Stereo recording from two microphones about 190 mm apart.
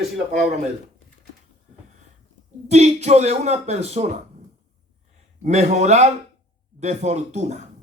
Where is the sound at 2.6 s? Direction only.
35° right (ahead or behind).